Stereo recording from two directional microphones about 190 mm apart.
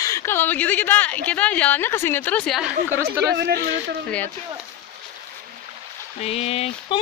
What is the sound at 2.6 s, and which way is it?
Speech, 10° right (ahead or behind).